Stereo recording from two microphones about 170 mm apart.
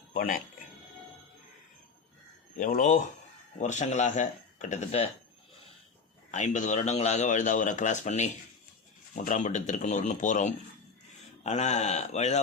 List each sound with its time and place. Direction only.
0.1 s music: 55° left (ahead or behind)
2.6 s a man's voice: 50° left (ahead or behind)
6.3 s a man's voice: 45° left (ahead or behind)